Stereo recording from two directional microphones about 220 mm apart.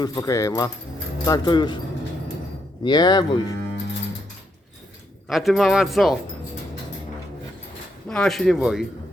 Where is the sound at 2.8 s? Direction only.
20° left (ahead or behind).